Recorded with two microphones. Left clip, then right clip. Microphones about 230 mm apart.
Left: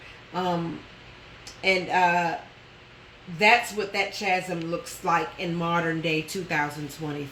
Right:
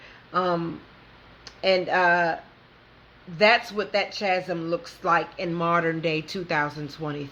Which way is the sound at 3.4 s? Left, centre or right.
Centre.